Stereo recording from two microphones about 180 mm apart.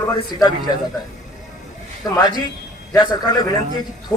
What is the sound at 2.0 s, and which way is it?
A man's voice, 20° left (ahead or behind).